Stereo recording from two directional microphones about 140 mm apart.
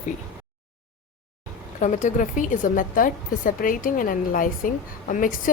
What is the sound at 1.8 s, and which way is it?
A woman's voice, 60° left (ahead or behind).